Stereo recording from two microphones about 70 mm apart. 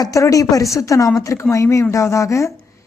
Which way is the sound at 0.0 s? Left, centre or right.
Left.